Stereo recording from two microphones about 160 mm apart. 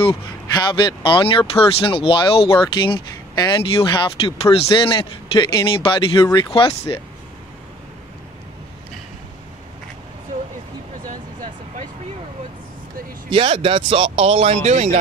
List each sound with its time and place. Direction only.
0.7 s speech: 30° left (ahead or behind)
13.3 s speech: 35° right (ahead or behind)